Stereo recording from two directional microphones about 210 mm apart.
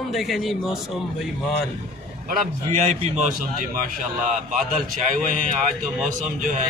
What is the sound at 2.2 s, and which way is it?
A man's voice, 40° right (ahead or behind).